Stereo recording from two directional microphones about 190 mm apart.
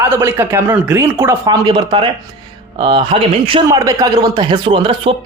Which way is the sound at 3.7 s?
20° right (ahead or behind).